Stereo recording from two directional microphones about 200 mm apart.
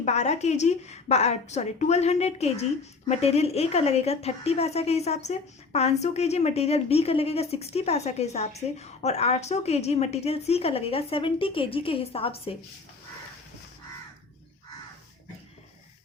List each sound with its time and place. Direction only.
0.0 s speech: 35° left (ahead or behind)